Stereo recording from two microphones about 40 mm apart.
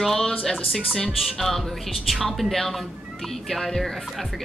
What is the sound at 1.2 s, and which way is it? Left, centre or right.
A woman's voice, centre.